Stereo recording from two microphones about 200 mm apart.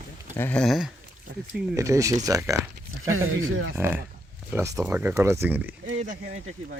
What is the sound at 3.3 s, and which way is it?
Speech, 80° right.